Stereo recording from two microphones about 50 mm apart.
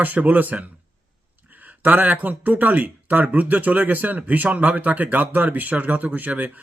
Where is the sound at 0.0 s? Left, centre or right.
Right.